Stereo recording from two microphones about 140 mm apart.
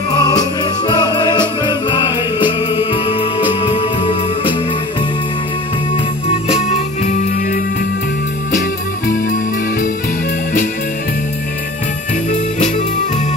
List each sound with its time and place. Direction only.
0.1 s music: 25° left (ahead or behind)
6.5 s music: 55° left (ahead or behind)
9.0 s music: 80° left
12.3 s music: 60° left (ahead or behind)